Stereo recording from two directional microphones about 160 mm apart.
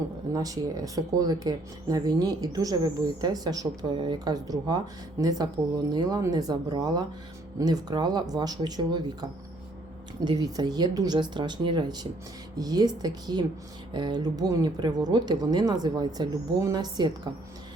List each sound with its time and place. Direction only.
0.3 s speech: 20° right (ahead or behind)